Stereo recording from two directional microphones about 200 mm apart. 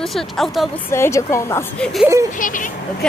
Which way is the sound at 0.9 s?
15° left (ahead or behind).